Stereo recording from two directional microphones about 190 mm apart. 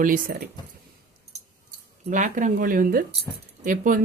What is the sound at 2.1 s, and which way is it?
Speech, 40° right (ahead or behind).